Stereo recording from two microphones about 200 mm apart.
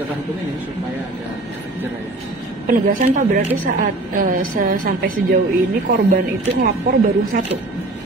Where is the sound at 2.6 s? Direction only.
45° right (ahead or behind).